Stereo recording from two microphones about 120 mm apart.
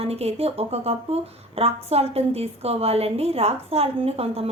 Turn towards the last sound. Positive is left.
turn(degrees=-55)  # may be behind; listen again after turning